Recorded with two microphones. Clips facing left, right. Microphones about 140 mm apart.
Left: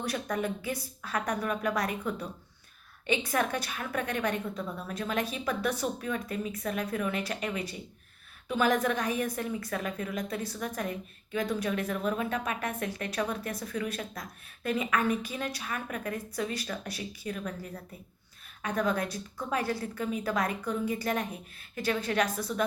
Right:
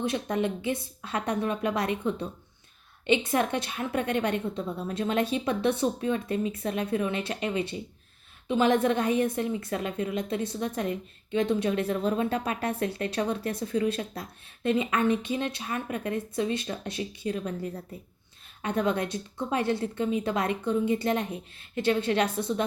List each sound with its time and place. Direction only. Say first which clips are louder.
0.0 s a woman's voice: right 4 dB; 25° right (ahead or behind)